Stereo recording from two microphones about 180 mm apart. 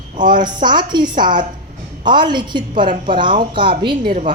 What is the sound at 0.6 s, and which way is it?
A woman's voice, 25° right (ahead or behind).